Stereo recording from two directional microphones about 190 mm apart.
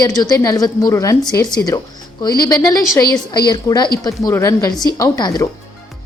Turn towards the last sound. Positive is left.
turn(degrees=20)  # may be behind; listen again after turning